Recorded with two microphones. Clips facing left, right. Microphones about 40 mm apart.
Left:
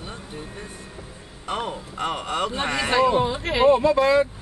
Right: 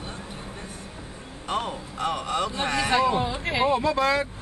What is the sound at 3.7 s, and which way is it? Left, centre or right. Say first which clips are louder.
Speech: left 6 dB; centre.